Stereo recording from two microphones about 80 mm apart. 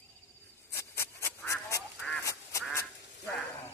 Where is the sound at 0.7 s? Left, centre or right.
Left.